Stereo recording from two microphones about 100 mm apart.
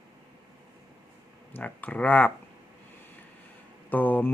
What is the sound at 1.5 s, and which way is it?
Speech, 15° left (ahead or behind).